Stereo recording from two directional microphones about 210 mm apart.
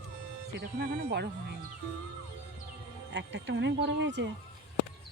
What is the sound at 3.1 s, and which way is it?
Speech, 60° right (ahead or behind).